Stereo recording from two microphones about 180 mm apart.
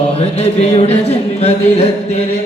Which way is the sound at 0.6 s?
35° left (ahead or behind).